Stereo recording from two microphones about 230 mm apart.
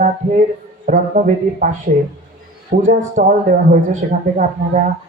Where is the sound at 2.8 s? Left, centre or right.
Right.